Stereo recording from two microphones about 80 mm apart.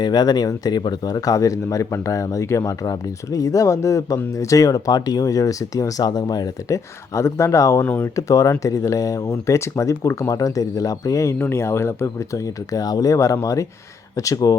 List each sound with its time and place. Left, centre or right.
0.0 s speech: left
2.8 s speech: left
6.1 s speech: left
6.7 s speech: left
7.9 s speech: left
8.1 s speech: left